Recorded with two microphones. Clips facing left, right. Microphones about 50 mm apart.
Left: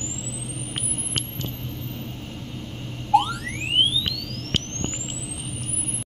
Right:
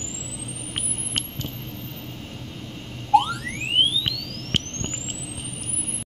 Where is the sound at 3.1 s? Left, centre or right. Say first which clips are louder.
Right 1 dB; centre.